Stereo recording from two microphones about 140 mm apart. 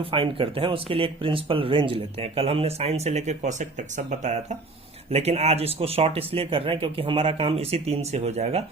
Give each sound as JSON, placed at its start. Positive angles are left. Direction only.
{"t": 0.0, "sound": "speech", "side_deg": -40}